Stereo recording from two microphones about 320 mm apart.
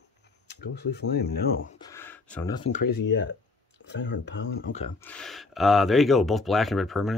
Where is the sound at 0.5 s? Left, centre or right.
Left.